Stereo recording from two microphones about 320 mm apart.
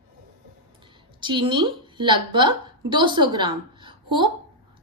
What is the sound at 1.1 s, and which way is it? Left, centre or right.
A woman's voice, centre.